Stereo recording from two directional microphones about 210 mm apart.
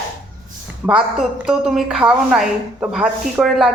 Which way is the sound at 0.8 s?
5° right (ahead or behind).